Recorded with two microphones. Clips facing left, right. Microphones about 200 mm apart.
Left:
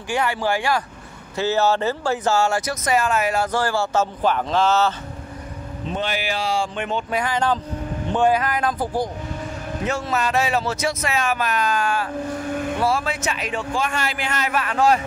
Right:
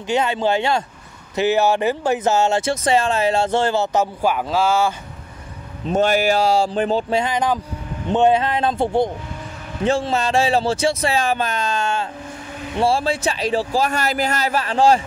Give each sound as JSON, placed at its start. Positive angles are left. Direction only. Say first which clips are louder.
{"t": 0.1, "sound": "speech", "louder": "right 3 dB", "side_deg": -20}
{"t": 5.9, "sound": "a man's voice", "louder": "right 9 dB", "side_deg": -45}